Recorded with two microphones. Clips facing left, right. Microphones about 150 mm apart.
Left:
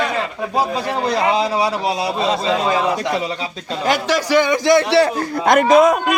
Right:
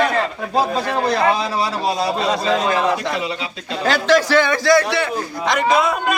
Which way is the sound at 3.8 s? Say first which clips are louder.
Right 3 dB; 10° left (ahead or behind).